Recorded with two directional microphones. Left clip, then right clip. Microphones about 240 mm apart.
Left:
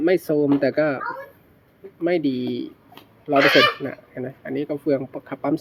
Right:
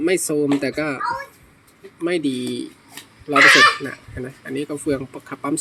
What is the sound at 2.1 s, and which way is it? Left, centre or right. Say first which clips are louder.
Speech: even; centre.